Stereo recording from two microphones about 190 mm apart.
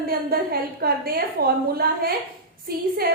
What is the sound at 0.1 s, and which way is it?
A woman's voice, 55° right (ahead or behind).